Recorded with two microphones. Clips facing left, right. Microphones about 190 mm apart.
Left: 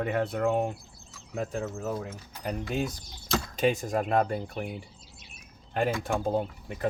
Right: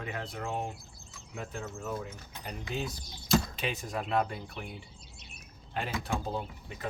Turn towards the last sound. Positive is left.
turn(degrees=50)  # may be behind; listen again after turning